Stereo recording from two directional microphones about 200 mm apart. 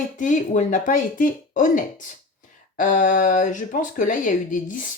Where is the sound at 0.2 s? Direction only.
40° left (ahead or behind).